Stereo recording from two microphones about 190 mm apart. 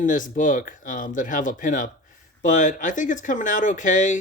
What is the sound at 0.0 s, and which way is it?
Speech, 45° left (ahead or behind).